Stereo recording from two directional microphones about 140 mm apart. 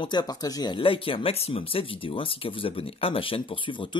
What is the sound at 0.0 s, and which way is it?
Speech, 30° left (ahead or behind).